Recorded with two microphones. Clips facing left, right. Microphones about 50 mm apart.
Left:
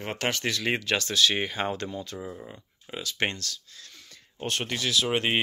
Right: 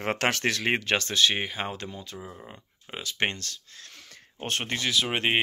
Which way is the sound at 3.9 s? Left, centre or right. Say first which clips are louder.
Right 2 dB; right.